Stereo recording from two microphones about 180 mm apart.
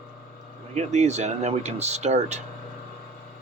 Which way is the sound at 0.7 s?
40° right (ahead or behind).